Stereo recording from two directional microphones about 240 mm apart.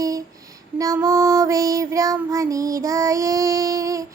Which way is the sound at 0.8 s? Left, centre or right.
Centre.